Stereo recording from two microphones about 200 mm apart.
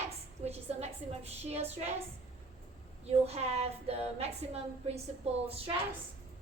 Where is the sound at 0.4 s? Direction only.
30° right (ahead or behind).